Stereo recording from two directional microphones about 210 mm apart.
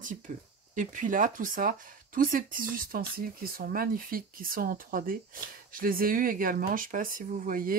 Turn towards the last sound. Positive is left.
turn(degrees=-40)  # may be behind; listen again after turning